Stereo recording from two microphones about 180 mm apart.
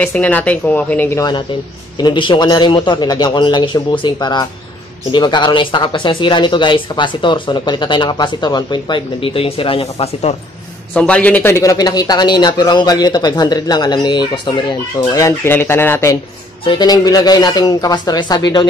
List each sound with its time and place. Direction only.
0.0 s speech: 10° left (ahead or behind)
2.0 s a man's voice: 25° left (ahead or behind)
10.9 s a man's voice: 5° left (ahead or behind); by 18.7 s 25° left (ahead or behind)